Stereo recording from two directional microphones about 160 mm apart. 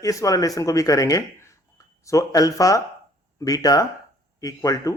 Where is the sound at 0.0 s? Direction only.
20° left (ahead or behind).